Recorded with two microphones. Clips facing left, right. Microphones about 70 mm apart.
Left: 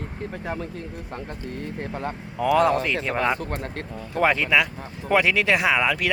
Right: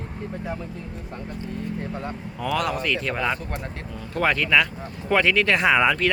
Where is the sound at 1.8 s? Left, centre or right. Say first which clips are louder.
Left 1 dB; left.